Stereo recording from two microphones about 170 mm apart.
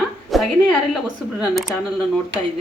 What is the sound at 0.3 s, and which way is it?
Speech, centre (ahead or behind).